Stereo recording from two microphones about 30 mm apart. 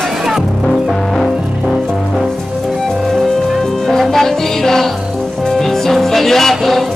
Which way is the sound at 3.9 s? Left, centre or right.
Centre.